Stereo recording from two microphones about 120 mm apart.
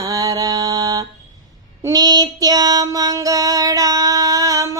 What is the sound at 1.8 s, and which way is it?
Music, 35° right (ahead or behind).